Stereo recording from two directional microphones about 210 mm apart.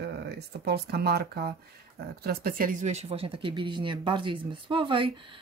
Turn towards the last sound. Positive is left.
turn(degrees=-25)  # may be behind; listen again after turning